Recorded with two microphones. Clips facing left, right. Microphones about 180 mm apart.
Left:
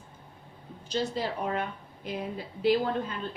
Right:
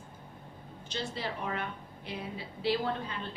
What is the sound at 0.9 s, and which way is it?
A woman's voice, 40° left (ahead or behind).